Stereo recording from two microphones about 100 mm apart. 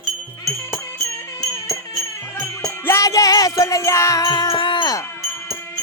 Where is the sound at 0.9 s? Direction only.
35° left (ahead or behind).